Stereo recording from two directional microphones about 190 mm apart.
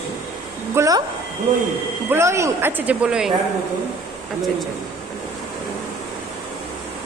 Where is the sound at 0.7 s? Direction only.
20° right (ahead or behind).